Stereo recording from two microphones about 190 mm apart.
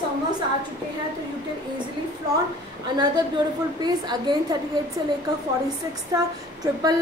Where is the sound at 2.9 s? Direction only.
20° right (ahead or behind).